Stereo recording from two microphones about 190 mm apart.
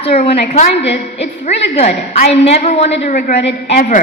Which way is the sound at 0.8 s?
65° left (ahead or behind).